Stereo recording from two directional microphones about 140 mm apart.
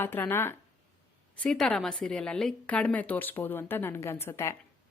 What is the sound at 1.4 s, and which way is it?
Speech, 5° left (ahead or behind).